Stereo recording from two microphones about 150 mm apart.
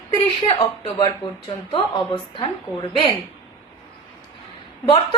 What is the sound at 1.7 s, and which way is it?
Speech, 40° left (ahead or behind).